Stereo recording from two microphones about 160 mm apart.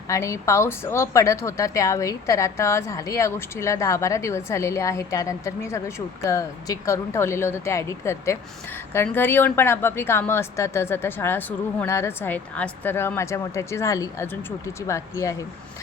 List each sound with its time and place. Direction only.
0.1 s a woman's voice: 20° left (ahead or behind)